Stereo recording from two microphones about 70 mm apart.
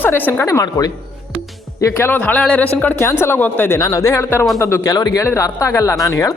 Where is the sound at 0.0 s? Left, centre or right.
Left.